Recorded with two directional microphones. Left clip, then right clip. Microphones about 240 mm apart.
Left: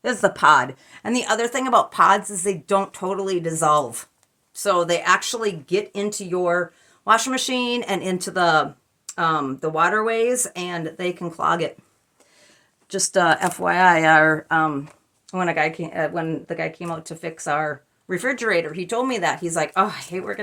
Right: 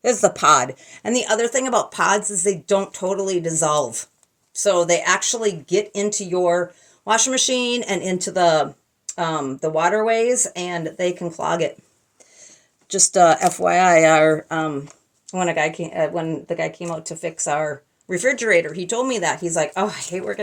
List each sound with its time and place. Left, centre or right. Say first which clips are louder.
0.0 s speech: right 1 dB; centre
12.9 s speech: right 4 dB; centre